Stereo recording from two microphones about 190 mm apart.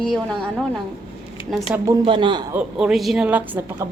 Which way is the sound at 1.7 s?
15° right (ahead or behind).